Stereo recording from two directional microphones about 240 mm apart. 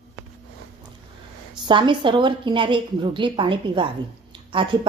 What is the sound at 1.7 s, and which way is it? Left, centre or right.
Speech, centre.